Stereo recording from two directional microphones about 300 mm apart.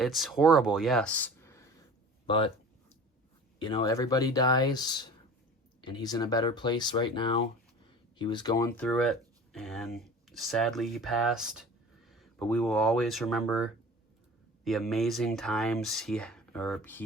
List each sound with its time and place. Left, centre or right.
0.0 s speech: centre
3.6 s speech: centre